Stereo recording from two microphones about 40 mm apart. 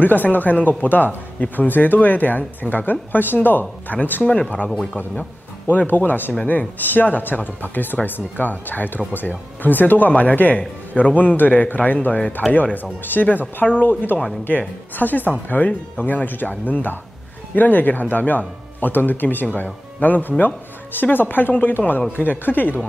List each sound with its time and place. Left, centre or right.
0.0 s speech: left
5.7 s speech: left
12.4 s speech: centre
13.0 s speech: left
16.3 s speech: left
19.5 s speech: left